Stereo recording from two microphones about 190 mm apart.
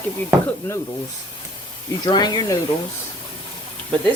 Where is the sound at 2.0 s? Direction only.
25° left (ahead or behind).